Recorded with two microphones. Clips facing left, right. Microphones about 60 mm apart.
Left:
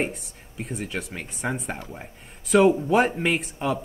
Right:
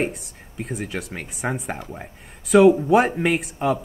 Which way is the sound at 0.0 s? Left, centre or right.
Centre.